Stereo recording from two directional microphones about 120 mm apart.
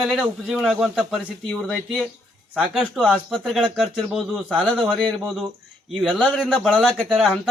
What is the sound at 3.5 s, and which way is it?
A man's voice, centre (ahead or behind).